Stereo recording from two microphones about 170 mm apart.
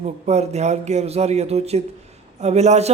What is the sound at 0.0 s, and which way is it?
A man's voice, 40° right (ahead or behind).